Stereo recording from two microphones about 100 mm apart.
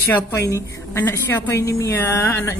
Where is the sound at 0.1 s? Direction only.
30° left (ahead or behind).